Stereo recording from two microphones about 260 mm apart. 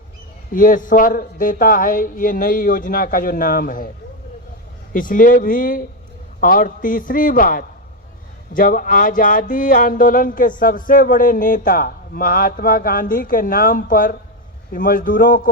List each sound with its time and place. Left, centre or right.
0.5 s speech: left
4.9 s speech: left